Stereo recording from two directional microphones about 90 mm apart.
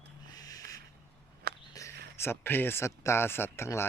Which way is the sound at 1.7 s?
30° left (ahead or behind).